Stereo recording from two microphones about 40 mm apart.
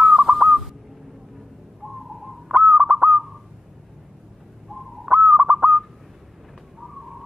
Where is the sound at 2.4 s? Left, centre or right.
Right.